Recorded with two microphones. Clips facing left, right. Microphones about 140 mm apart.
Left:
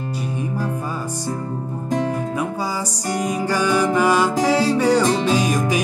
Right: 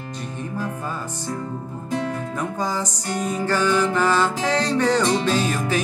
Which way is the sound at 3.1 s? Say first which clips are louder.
Left 2 dB; 10° left (ahead or behind).